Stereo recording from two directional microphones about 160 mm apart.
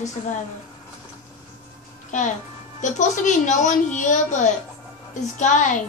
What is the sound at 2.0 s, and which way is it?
A child's voice, 50° left (ahead or behind).